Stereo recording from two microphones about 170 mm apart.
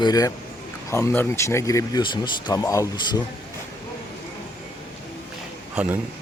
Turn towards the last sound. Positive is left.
turn(degrees=-10)  # may be behind; listen again after turning